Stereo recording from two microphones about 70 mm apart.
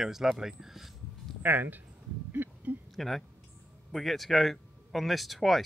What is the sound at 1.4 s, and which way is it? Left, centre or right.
Speech, right.